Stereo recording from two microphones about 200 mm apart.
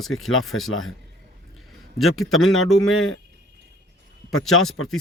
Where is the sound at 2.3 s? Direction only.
90° left.